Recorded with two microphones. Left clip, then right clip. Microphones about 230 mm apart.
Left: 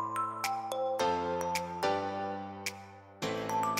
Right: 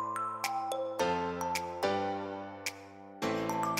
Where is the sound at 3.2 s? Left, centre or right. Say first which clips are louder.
Even; centre.